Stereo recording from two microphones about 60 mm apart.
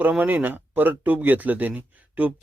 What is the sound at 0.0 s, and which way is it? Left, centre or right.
Speech, right.